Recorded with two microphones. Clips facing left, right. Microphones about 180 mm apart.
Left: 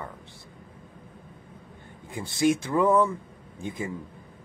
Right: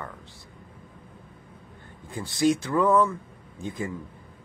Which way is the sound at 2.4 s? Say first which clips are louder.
Even; 20° left (ahead or behind).